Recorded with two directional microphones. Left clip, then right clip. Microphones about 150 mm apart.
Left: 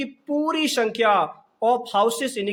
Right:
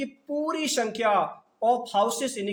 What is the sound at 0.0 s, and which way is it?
Speech, 40° left (ahead or behind).